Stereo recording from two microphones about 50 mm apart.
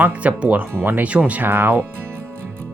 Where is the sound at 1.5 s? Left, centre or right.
Right.